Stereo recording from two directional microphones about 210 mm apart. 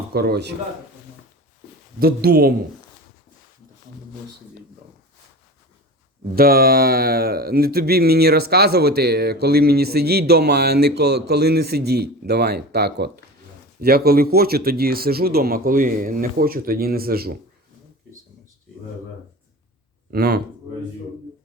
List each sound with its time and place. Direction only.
0.1 s speech: 50° right (ahead or behind)
2.0 s speech: 45° right (ahead or behind)
6.3 s speech: 45° right (ahead or behind)
20.1 s speech: 50° right (ahead or behind)